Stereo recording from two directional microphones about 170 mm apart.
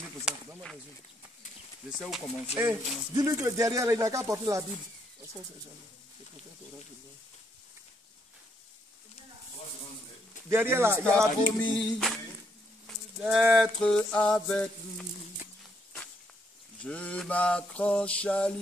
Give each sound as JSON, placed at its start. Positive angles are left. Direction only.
{"t": 0.2, "sound": "a sound", "side_deg": -5}
{"t": 1.9, "sound": "mantra", "side_deg": 0}
{"t": 2.6, "sound": "speech", "side_deg": -15}
{"t": 10.5, "sound": "speech", "side_deg": -15}
{"t": 11.1, "sound": "mantra", "side_deg": 5}
{"t": 13.2, "sound": "mantra", "side_deg": 0}
{"t": 16.8, "sound": "mantra", "side_deg": 10}